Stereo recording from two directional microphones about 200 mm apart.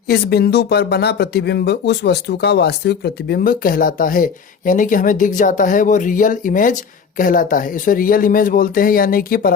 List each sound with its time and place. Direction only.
0.1 s speech: 50° left (ahead or behind)